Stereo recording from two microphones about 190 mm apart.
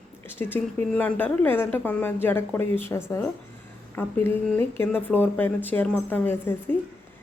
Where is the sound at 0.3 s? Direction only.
10° left (ahead or behind).